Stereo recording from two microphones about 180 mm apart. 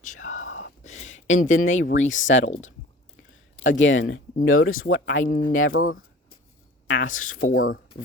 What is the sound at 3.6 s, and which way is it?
Speech, 90° left.